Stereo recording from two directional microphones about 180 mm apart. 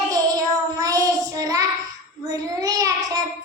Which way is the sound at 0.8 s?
20° right (ahead or behind).